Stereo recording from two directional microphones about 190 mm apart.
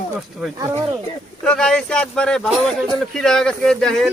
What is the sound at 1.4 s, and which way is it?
Speech, 5° left (ahead or behind).